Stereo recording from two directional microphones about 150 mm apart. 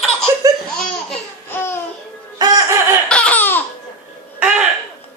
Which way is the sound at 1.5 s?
15° left (ahead or behind).